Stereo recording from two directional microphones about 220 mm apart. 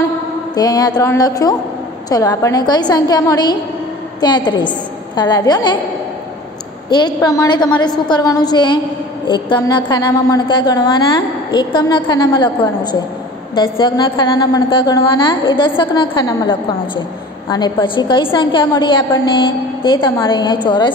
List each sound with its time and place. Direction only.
0.6 s a woman's voice: 15° left (ahead or behind)
6.9 s a woman's voice: 20° left (ahead or behind)